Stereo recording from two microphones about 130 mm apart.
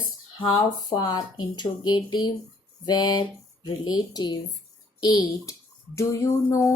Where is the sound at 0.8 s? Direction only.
30° left (ahead or behind).